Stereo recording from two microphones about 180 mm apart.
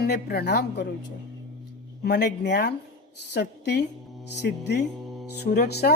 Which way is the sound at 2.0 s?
65° left (ahead or behind).